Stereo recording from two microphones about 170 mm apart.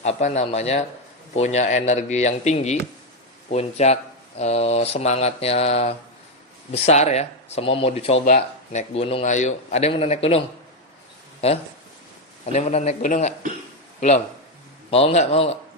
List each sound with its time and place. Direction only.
0.0 s a man's voice: 40° left (ahead or behind)
8.2 s a man's voice: 50° left (ahead or behind)
14.8 s a man's voice: 35° left (ahead or behind)